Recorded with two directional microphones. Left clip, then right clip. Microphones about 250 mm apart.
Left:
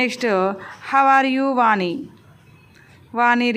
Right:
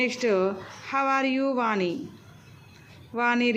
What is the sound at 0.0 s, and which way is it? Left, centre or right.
A woman's voice, centre.